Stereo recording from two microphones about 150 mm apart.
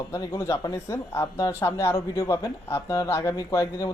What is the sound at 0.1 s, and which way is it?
Speech, 20° left (ahead or behind).